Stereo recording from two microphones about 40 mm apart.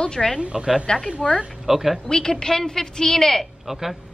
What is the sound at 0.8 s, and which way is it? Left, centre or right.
Speech, centre.